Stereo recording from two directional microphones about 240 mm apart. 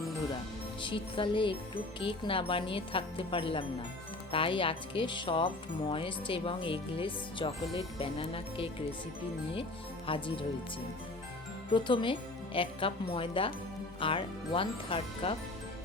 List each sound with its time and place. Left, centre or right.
0.8 s speech: left
10.1 s speech: left
11.7 s speech: centre